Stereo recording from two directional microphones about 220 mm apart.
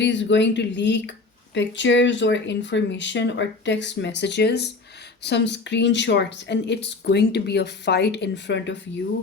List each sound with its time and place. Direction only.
0.0 s speech: 55° left (ahead or behind)